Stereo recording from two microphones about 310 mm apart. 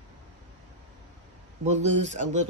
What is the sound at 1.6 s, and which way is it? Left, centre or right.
Speech, right.